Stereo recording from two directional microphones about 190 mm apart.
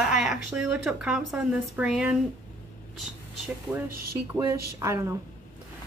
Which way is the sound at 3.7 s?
15° right (ahead or behind).